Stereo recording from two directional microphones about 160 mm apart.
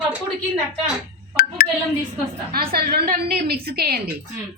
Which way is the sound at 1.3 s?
70° left (ahead or behind).